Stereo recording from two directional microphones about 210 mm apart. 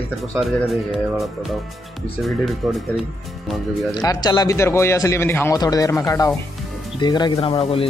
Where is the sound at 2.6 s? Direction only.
Centre (ahead or behind).